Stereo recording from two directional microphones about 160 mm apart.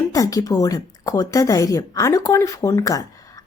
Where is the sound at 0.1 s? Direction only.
20° left (ahead or behind).